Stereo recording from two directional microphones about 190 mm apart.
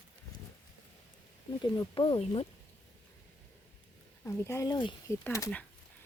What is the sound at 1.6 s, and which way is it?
Speech, 25° left (ahead or behind).